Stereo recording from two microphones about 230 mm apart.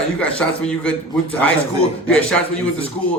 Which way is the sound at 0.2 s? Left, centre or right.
Centre.